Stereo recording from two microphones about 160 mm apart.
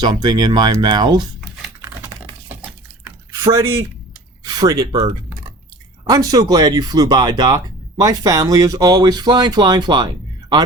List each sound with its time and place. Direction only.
0.0 s speech: 25° right (ahead or behind)
3.4 s speech: 20° right (ahead or behind)